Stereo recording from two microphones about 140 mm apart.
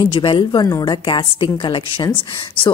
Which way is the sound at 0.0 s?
35° left (ahead or behind).